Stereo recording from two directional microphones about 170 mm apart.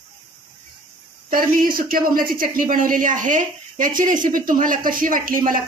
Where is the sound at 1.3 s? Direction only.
55° right (ahead or behind).